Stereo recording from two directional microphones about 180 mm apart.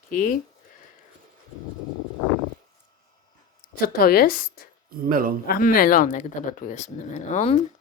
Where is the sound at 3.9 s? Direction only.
55° left (ahead or behind).